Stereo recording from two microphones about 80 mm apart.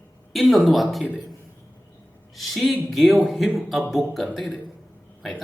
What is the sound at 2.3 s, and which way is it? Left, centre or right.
Speech, centre.